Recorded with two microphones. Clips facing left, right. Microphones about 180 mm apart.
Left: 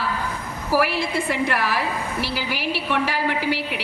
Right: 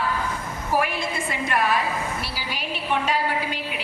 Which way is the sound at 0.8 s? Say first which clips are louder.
Left 3 dB; 70° left (ahead or behind).